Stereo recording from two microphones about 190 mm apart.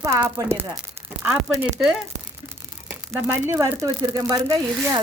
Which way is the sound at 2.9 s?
5° right (ahead or behind).